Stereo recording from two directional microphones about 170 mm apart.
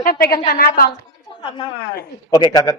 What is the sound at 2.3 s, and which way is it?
Speech, 25° left (ahead or behind).